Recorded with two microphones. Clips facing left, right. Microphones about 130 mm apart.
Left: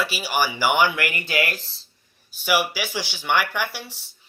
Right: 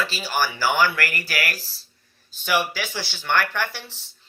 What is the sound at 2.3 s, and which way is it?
Speech, 10° left (ahead or behind).